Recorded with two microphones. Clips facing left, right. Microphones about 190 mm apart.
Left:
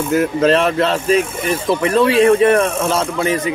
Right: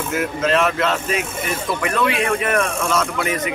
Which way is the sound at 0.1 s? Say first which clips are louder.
Left 6 dB; 35° left (ahead or behind).